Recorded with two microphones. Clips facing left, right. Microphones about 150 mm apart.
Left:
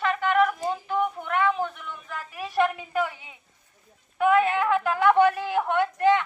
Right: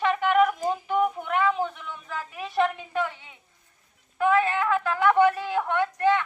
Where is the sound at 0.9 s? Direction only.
5° right (ahead or behind).